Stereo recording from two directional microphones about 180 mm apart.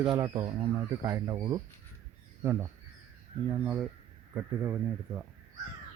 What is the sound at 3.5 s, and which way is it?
Speech, 5° right (ahead or behind).